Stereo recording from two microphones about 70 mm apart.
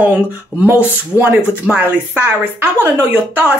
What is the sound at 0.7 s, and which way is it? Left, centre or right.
Speech, right.